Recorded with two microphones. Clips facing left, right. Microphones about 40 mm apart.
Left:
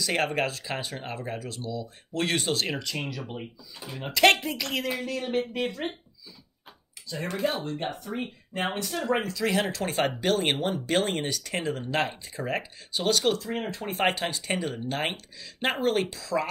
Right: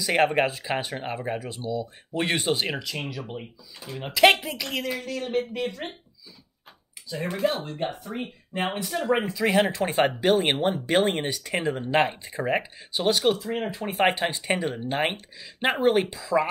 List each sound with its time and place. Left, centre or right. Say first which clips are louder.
0.0 s speech: right 5 dB; centre
2.7 s speech: right 1 dB; centre
7.1 s speech: right 3 dB; centre
9.1 s speech: right 4 dB; centre
14.1 s speech: right 4 dB; right